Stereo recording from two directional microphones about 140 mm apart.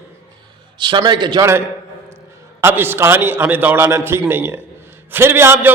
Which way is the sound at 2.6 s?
15° right (ahead or behind).